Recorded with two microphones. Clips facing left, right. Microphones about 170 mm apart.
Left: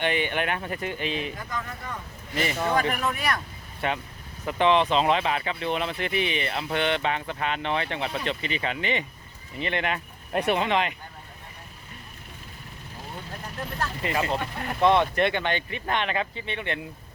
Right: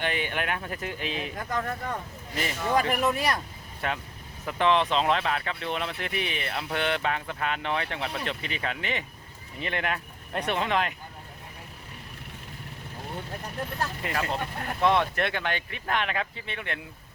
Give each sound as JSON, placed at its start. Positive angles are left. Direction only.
{"t": 0.0, "sound": "speech", "side_deg": 0}
{"t": 1.5, "sound": "speech", "side_deg": -55}
{"t": 2.3, "sound": "speech", "side_deg": 0}
{"t": 2.9, "sound": "speech", "side_deg": -30}
{"t": 3.8, "sound": "speech", "side_deg": 0}
{"t": 14.0, "sound": "speech", "side_deg": 0}